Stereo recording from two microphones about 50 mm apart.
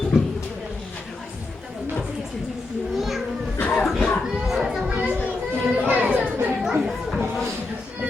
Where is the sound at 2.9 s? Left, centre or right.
Centre.